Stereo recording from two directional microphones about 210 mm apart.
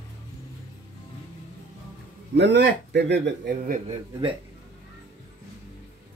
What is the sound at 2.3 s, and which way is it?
A man's voice, 55° right (ahead or behind).